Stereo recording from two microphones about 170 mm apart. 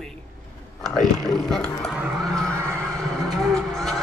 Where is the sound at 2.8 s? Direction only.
Centre (ahead or behind).